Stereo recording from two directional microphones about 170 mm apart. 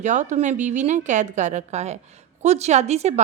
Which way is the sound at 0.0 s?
45° right (ahead or behind).